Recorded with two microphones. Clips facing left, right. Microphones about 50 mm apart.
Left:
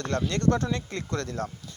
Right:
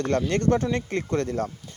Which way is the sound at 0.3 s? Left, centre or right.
Right.